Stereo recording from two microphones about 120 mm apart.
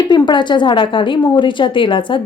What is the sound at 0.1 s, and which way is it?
A woman's voice, 40° left (ahead or behind).